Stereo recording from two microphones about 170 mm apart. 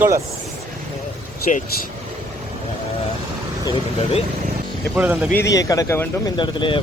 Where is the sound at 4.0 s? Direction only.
35° left (ahead or behind).